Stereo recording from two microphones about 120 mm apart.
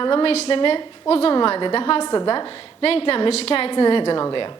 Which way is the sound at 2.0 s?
35° left (ahead or behind).